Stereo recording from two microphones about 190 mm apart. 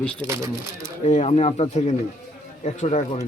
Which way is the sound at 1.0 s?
35° left (ahead or behind).